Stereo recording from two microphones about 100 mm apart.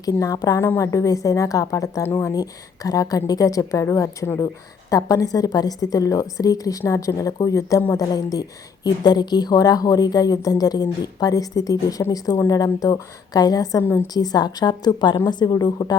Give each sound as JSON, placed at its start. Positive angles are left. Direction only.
{"t": 0.0, "sound": "a woman's voice", "side_deg": 35}